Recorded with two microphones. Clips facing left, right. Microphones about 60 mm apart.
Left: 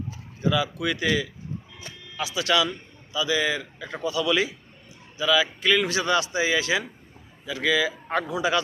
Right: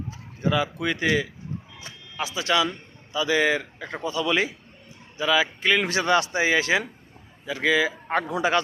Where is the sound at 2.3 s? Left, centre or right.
Right.